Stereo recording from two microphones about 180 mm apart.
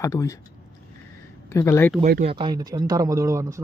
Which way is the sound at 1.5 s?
15° left (ahead or behind).